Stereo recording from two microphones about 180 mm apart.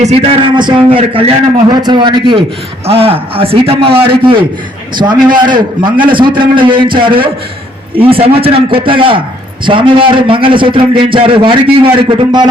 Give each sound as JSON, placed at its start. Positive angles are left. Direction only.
{"t": 0.0, "sound": "a man's voice", "side_deg": -35}